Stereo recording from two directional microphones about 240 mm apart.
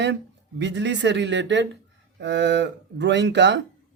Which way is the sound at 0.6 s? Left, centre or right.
Right.